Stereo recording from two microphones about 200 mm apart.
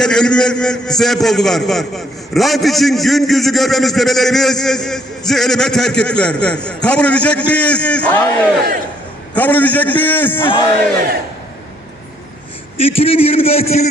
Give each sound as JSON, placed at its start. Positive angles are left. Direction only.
{"t": 0.0, "sound": "a man's voice", "side_deg": 5}
{"t": 12.7, "sound": "a man's voice", "side_deg": 30}